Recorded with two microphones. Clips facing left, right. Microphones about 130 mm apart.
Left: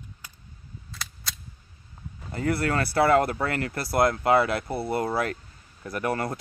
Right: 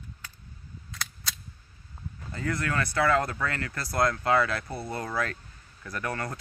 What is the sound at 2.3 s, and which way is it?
Speech, 30° left (ahead or behind).